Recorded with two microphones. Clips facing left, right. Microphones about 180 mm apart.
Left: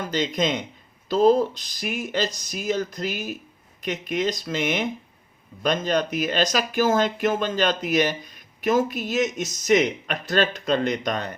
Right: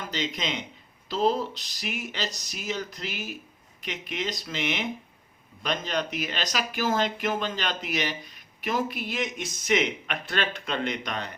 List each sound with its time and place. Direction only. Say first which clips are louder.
0.1 s speech: left 8 dB; 45° left (ahead or behind)